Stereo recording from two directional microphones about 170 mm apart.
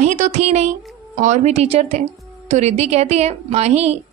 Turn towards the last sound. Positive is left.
turn(degrees=-40)  # may be behind; listen again after turning